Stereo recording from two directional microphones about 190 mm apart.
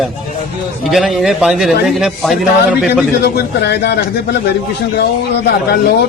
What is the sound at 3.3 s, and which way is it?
Speech, 60° left (ahead or behind).